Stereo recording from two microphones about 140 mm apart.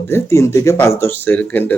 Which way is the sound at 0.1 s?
20° left (ahead or behind).